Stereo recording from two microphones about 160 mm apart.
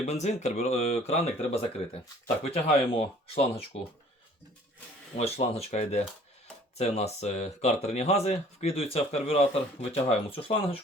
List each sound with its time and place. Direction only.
0.0 s speech: 45° left (ahead or behind)
5.1 s speech: 40° left (ahead or behind)